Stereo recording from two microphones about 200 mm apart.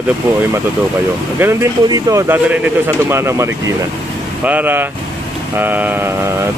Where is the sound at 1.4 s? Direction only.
15° right (ahead or behind).